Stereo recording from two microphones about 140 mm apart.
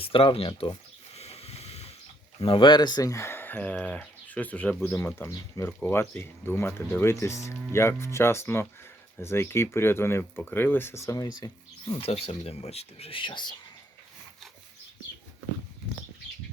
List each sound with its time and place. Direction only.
0.0 s speech: 40° left (ahead or behind)
1.1 s a sound: 50° left (ahead or behind)
2.4 s speech: 35° left (ahead or behind)
11.9 s speech: 45° left (ahead or behind)